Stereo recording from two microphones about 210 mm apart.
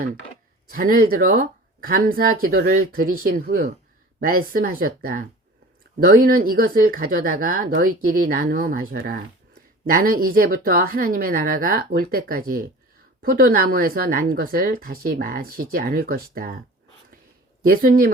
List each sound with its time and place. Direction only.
0.7 s a woman's voice: 40° right (ahead or behind)
17.6 s a woman's voice: 45° right (ahead or behind)